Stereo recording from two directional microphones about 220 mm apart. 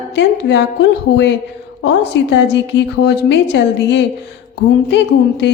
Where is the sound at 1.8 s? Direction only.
50° left (ahead or behind).